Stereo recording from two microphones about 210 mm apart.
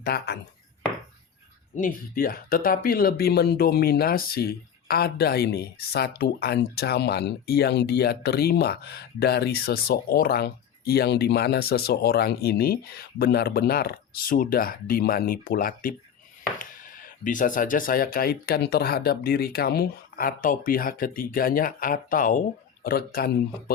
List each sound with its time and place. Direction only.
0.0 s speech: 50° left (ahead or behind)
1.7 s speech: 40° left (ahead or behind)